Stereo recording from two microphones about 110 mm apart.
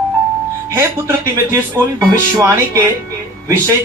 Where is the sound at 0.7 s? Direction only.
25° right (ahead or behind).